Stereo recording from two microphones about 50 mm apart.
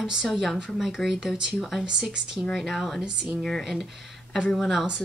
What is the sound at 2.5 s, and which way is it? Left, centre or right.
Speech, centre.